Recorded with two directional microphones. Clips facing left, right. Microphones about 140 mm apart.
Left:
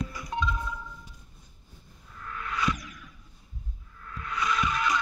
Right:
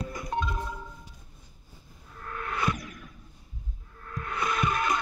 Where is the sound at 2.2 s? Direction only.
45° right (ahead or behind).